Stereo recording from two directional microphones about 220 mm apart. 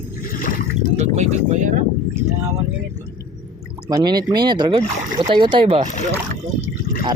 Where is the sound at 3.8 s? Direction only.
20° right (ahead or behind).